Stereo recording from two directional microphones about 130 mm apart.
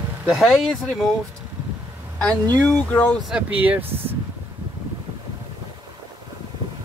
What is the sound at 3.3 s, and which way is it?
Speech, 10° right (ahead or behind).